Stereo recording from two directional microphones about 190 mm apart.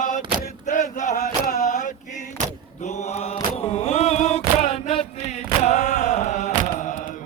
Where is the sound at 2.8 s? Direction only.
35° left (ahead or behind).